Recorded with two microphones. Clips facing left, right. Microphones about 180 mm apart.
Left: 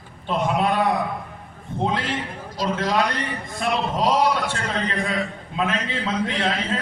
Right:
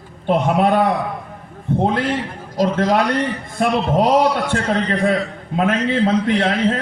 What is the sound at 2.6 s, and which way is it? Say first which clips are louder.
A man's voice: right 6 dB; 55° right (ahead or behind).